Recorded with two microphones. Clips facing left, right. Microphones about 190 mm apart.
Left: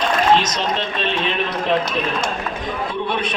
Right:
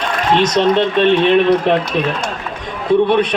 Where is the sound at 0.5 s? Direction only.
65° right (ahead or behind).